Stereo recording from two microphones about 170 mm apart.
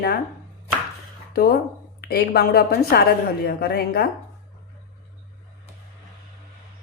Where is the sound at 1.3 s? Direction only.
65° left (ahead or behind).